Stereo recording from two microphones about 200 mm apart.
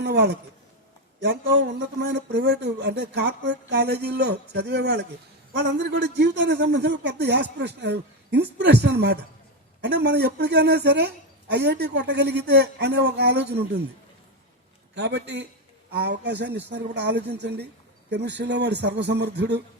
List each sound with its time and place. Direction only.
0.0 s speech: 55° right (ahead or behind)
14.9 s speech: 60° right (ahead or behind)